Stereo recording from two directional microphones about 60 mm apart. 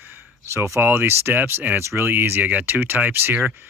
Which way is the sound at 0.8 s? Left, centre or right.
Right.